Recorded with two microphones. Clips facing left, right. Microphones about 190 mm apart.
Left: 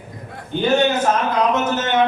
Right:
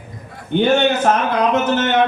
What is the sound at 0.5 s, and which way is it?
Speech, 65° right (ahead or behind).